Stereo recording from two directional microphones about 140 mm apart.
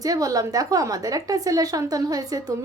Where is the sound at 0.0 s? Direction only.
25° right (ahead or behind).